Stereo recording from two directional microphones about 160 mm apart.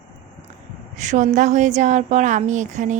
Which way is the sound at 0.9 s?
50° right (ahead or behind).